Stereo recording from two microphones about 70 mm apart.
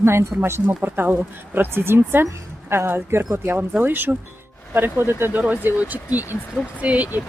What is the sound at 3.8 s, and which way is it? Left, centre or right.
Speech, right.